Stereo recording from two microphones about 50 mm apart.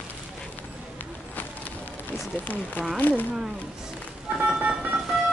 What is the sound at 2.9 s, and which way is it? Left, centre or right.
Speech, left.